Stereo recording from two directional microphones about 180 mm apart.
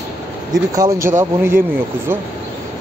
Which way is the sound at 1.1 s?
15° right (ahead or behind).